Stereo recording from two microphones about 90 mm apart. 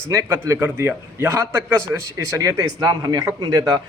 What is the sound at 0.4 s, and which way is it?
A man's voice, 30° right (ahead or behind).